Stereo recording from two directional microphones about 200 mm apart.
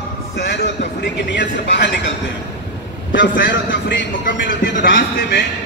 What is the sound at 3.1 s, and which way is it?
Speech, 65° left (ahead or behind).